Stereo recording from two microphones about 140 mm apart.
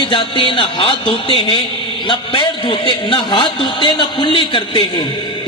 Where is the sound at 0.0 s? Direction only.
35° left (ahead or behind).